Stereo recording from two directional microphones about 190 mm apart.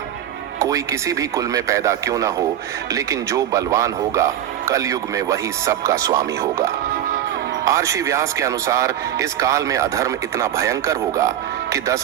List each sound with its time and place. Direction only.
0.6 s speech: 15° right (ahead or behind)